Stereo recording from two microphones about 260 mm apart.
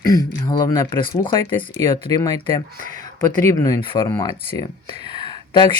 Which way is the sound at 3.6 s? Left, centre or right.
Centre.